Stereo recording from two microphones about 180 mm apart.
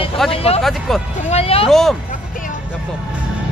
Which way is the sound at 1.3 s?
35° left (ahead or behind).